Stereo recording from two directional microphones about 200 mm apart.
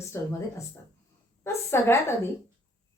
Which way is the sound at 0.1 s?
10° left (ahead or behind).